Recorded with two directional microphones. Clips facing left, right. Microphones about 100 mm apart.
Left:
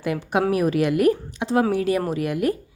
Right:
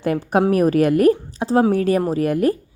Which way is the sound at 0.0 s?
45° right (ahead or behind).